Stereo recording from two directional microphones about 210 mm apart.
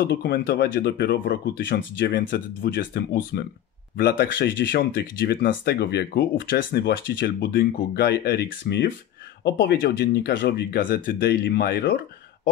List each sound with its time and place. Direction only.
0.0 s speech: 45° left (ahead or behind)